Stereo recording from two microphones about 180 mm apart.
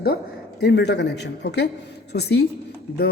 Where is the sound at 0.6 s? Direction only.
70° left (ahead or behind).